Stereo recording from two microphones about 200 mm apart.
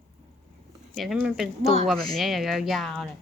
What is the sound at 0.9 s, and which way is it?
A woman's voice, centre (ahead or behind).